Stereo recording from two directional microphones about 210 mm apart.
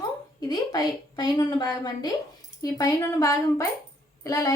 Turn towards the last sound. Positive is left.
turn(degrees=15)  # may be behind; listen again after turning